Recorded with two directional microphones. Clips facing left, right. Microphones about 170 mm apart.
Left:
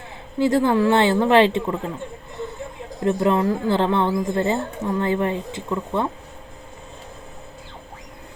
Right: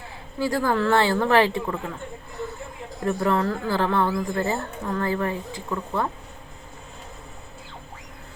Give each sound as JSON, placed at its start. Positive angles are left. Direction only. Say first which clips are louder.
{"t": 0.3, "sound": "a woman's voice", "louder": "left 5 dB", "side_deg": 20}
{"t": 3.0, "sound": "a woman's voice", "louder": "left 4 dB", "side_deg": 20}